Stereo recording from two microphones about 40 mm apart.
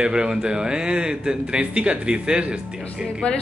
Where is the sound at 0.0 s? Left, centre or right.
Right.